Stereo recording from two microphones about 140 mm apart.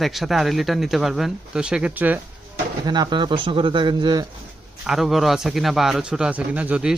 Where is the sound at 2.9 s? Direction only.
30° right (ahead or behind).